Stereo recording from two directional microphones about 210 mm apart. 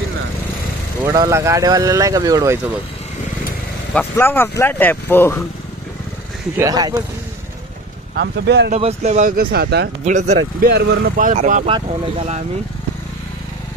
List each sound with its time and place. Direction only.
1.0 s speech: 15° right (ahead or behind)
3.9 s speech: 10° left (ahead or behind)
6.5 s speech: 15° right (ahead or behind)
8.1 s speech: 55° right (ahead or behind)
8.7 s speech: 30° right (ahead or behind); by 9.8 s 50° right (ahead or behind)
10.0 s speech: 35° right (ahead or behind)
10.7 s speech: 50° right (ahead or behind); by 11.7 s 35° right (ahead or behind)